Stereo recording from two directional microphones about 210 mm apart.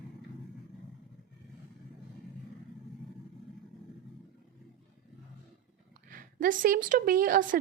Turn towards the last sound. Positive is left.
turn(degrees=-40)  # may be behind; listen again after turning